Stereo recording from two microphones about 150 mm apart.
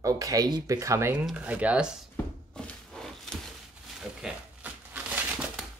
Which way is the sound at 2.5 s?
5° left (ahead or behind).